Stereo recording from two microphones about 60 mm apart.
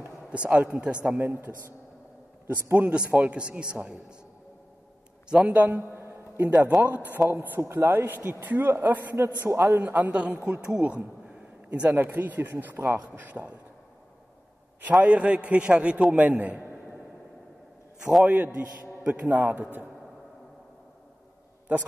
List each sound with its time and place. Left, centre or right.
0.3 s a man's voice: right
3.1 s a man's voice: right
5.3 s a man's voice: right
5.8 s music: right
6.8 s a man's voice: right
9.1 s a man's voice: right
9.8 s a man's voice: right
14.8 s a man's voice: right
18.2 s a man's voice: right
21.7 s a man's voice: right